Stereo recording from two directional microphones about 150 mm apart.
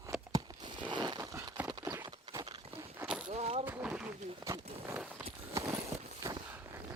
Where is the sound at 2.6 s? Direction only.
40° right (ahead or behind).